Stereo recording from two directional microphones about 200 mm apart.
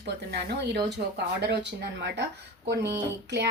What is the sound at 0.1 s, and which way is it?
Speech, 55° right (ahead or behind).